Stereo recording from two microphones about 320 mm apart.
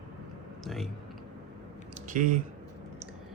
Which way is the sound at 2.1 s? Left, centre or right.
Right.